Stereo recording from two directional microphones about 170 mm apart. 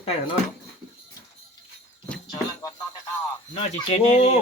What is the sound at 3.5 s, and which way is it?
Speech, 35° left (ahead or behind).